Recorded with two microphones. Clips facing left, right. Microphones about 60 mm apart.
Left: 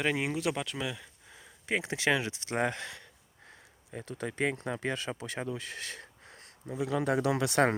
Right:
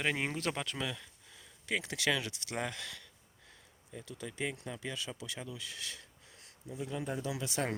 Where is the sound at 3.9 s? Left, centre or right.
Left.